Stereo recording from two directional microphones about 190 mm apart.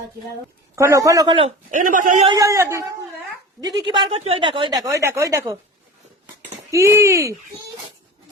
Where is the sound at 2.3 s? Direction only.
15° right (ahead or behind).